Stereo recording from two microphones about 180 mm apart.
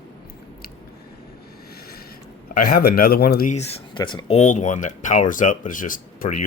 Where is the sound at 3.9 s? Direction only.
25° left (ahead or behind).